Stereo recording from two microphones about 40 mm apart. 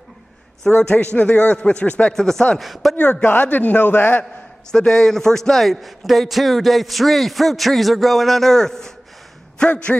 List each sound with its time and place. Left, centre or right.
0.7 s a man's voice: left
1.8 s speech: left
2.1 s speech: centre
2.6 s a man's voice: centre
3.0 s a man's voice: left
4.6 s a man's voice: centre
9.7 s speech: left